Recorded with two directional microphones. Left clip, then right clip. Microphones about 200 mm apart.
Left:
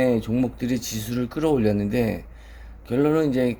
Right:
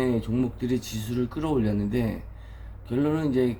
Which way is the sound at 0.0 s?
55° left (ahead or behind).